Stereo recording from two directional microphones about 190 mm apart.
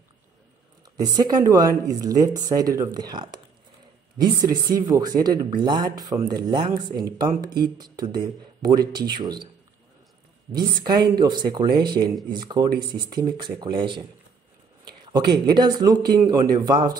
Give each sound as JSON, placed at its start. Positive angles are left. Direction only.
{"t": 0.9, "sound": "speech", "side_deg": -20}
{"t": 10.5, "sound": "speech", "side_deg": -25}